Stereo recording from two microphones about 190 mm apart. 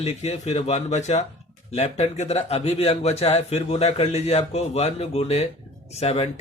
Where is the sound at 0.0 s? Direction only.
35° left (ahead or behind).